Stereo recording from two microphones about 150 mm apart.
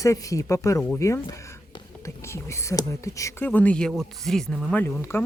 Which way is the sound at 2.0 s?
20° left (ahead or behind).